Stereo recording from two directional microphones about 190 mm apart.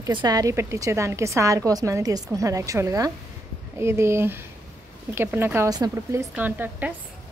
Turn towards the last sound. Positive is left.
turn(degrees=-10)  # may be behind; listen again after turning